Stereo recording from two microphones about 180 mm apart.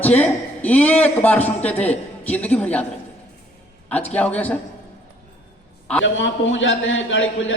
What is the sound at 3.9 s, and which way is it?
Speech, 10° left (ahead or behind).